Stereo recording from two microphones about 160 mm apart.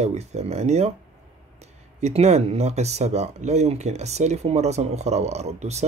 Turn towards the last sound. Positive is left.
turn(degrees=-45)  # may be behind; listen again after turning